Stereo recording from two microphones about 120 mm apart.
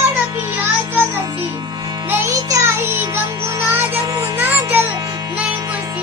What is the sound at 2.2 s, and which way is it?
Music, 25° right (ahead or behind).